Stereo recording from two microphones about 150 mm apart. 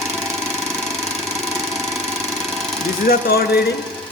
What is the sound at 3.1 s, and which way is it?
Speech, 90° left.